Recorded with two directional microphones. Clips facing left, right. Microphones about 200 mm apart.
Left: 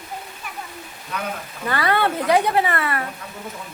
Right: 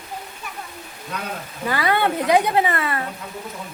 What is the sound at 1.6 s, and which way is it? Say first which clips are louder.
Speech: even; 15° right (ahead or behind).